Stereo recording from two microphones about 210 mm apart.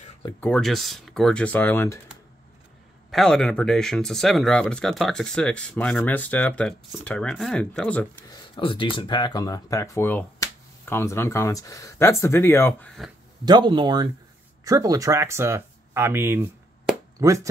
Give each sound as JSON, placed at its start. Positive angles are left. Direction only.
{"t": 0.4, "sound": "speech", "side_deg": 5}
{"t": 3.1, "sound": "speech", "side_deg": 0}
{"t": 8.3, "sound": "speech", "side_deg": 25}
{"t": 13.5, "sound": "speech", "side_deg": -20}